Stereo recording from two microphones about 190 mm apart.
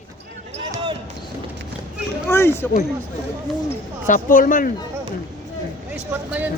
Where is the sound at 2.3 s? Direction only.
10° left (ahead or behind).